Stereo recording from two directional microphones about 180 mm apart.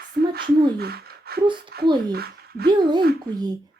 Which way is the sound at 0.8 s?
60° right (ahead or behind).